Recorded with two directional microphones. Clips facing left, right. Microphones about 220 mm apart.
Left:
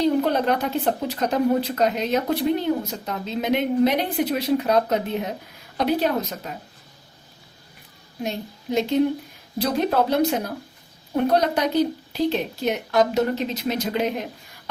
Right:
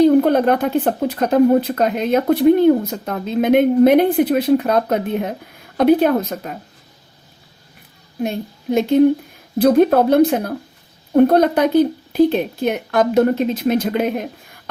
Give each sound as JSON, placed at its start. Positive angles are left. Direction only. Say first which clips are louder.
{"t": 0.0, "sound": "speech", "louder": "right 8 dB", "side_deg": -50}
{"t": 8.2, "sound": "speech", "louder": "right 6 dB", "side_deg": -50}